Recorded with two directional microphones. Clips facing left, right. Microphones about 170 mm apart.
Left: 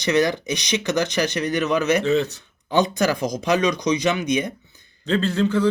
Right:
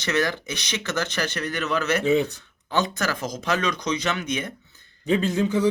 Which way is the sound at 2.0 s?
10° right (ahead or behind).